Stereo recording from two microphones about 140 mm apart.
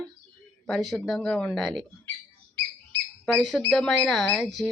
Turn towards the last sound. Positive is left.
turn(degrees=5)  # may be behind; listen again after turning